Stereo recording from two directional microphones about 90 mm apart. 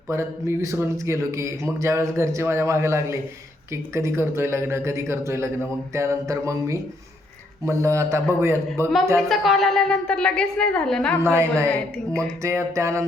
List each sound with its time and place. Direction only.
0.1 s a man's voice: 30° right (ahead or behind)
9.3 s speech: centre (ahead or behind)
11.2 s a man's voice: 30° right (ahead or behind)